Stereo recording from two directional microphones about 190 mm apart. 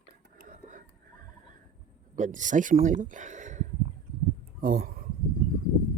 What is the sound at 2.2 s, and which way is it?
Speech, 40° right (ahead or behind).